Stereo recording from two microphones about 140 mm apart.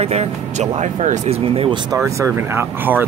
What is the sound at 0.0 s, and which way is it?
Speech, 50° right (ahead or behind).